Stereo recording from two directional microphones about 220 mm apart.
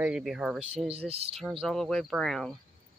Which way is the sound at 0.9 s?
25° right (ahead or behind).